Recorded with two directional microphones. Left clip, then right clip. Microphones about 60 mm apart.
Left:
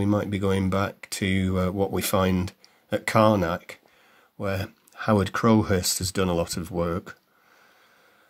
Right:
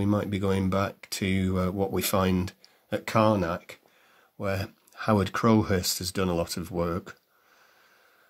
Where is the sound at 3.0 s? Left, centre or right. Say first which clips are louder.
Left 4 dB; left.